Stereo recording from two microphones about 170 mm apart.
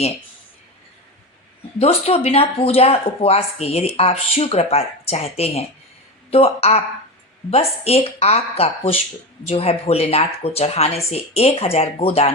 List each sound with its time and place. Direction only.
1.8 s speech: 35° left (ahead or behind)